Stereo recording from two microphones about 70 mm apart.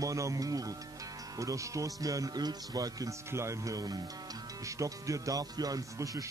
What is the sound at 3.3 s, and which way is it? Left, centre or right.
Speech, right.